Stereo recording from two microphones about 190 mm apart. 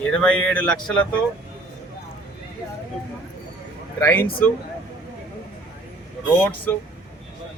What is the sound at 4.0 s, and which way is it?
Speech, 10° left (ahead or behind).